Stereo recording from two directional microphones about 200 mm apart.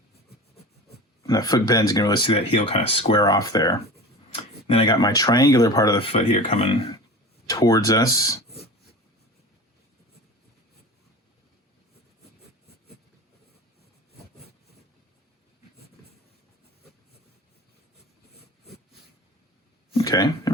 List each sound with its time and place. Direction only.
1.3 s speech: 20° left (ahead or behind)
7.4 s speech: 15° left (ahead or behind)
20.0 s a sound: 20° left (ahead or behind)